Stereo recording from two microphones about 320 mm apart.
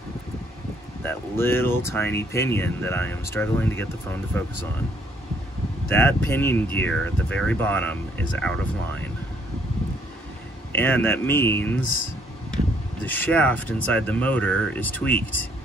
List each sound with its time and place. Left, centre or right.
1.0 s speech: centre
5.9 s speech: centre
10.7 s speech: centre
13.0 s speech: centre